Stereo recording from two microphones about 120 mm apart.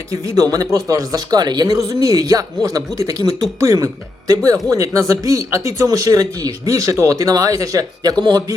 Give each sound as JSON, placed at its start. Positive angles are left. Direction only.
{"t": 0.1, "sound": "a man's voice", "side_deg": -30}